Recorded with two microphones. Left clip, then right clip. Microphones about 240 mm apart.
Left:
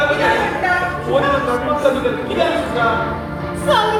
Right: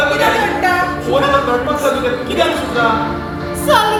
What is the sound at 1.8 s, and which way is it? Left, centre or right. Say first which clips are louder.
Speech: left 1 dB; right.